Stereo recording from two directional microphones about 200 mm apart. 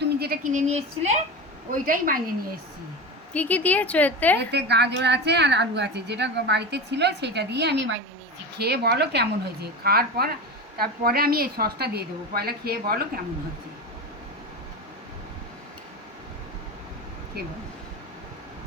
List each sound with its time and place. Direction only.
0.0 s a woman's voice: 50° right (ahead or behind)
3.3 s a woman's voice: 10° left (ahead or behind)
4.4 s a woman's voice: 55° right (ahead or behind)
8.5 s a woman's voice: 55° right (ahead or behind)